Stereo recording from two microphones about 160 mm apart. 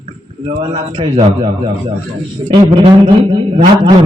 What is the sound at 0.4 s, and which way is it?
A man's voice, 35° right (ahead or behind).